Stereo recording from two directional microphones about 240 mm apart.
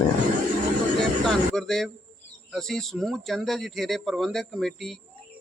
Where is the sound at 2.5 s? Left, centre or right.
Centre.